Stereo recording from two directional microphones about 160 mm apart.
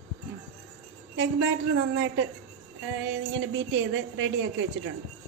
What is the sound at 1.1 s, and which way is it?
Speech, 90° right.